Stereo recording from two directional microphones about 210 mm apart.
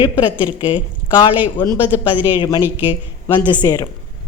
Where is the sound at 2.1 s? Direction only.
10° right (ahead or behind).